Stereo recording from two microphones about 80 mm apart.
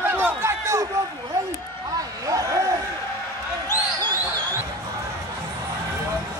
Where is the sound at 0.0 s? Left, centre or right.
Right.